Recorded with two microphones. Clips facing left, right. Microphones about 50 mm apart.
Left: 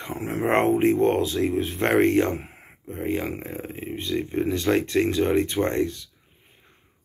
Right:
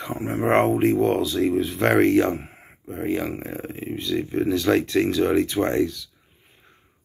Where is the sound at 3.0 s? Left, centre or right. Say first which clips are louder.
Right 2 dB; left.